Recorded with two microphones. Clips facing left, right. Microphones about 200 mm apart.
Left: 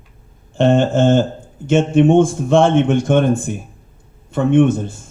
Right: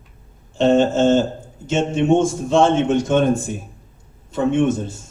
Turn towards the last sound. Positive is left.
turn(degrees=55)  # may be behind; listen again after turning